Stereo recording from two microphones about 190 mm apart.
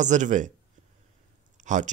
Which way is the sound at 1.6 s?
40° right (ahead or behind).